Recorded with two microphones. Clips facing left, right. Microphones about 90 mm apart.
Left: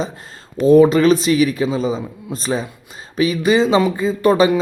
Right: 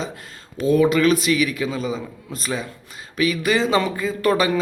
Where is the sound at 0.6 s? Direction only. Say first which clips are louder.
Left 6 dB; 30° left (ahead or behind).